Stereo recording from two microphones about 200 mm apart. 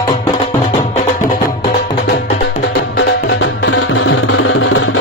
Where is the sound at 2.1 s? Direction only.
55° left (ahead or behind).